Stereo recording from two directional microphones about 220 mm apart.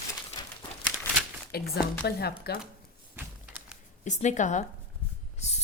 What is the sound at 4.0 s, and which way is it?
Speech, 35° left (ahead or behind).